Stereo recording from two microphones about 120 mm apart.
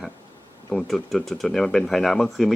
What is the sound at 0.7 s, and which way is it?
Speech, 5° left (ahead or behind).